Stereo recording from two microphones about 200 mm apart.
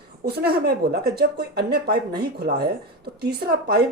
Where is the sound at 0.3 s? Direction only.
50° right (ahead or behind).